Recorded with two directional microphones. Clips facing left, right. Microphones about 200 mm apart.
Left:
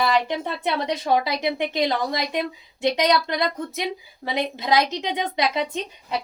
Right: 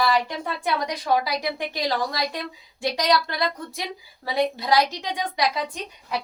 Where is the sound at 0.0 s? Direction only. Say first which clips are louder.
Left 1 dB; 25° left (ahead or behind).